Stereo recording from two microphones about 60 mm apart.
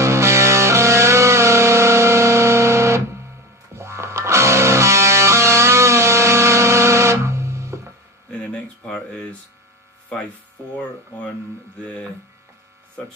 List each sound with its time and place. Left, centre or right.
0.0 s music: right
8.3 s a sound: centre
11.8 s hum: centre